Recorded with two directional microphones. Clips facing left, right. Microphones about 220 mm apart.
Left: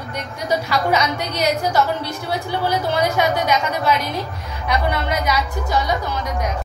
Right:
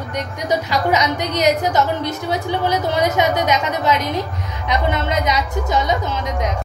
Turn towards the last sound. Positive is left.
turn(degrees=-20)  # may be behind; listen again after turning